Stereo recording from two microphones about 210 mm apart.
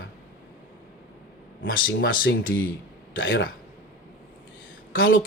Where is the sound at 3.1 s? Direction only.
65° left (ahead or behind).